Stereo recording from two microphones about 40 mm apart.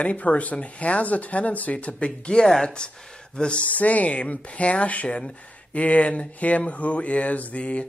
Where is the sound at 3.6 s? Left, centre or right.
Left.